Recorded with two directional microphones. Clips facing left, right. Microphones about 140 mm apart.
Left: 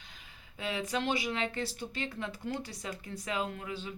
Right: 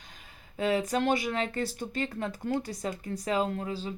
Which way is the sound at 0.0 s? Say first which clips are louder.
Right 3 dB; 45° right (ahead or behind).